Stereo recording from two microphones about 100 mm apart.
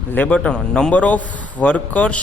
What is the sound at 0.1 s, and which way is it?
A man's voice, 15° left (ahead or behind).